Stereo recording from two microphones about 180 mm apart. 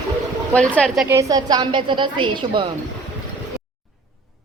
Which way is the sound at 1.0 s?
15° right (ahead or behind).